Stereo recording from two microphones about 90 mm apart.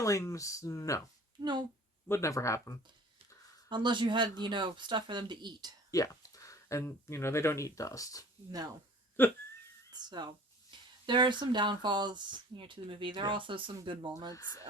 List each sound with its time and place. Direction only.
0.0 s speech: 35° left (ahead or behind)
1.4 s speech: 55° right (ahead or behind)
2.0 s speech: 30° left (ahead or behind)
3.7 s speech: 60° right (ahead or behind)
5.9 s speech: 40° left (ahead or behind)
9.2 s a sound: 25° left (ahead or behind)
9.9 s speech: 55° right (ahead or behind)
14.3 s speech: 35° left (ahead or behind)